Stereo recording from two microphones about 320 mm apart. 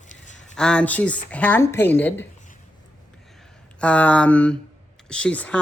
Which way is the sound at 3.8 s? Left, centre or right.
Centre.